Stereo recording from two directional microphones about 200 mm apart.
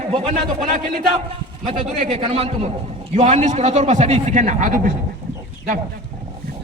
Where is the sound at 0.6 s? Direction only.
40° right (ahead or behind).